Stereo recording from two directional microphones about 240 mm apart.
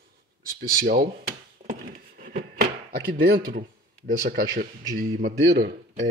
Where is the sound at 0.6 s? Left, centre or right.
Right.